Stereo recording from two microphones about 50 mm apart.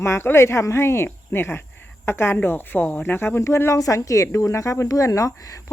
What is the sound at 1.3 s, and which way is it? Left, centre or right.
Speech, left.